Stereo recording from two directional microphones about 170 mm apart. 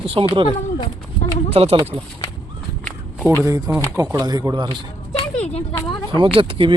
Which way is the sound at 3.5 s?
20° right (ahead or behind).